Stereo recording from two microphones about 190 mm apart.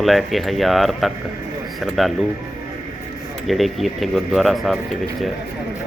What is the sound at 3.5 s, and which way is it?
Speech, centre (ahead or behind).